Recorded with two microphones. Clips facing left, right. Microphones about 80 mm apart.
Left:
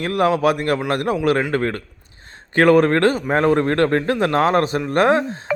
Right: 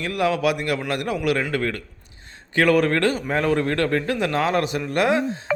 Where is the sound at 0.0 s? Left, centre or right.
Left.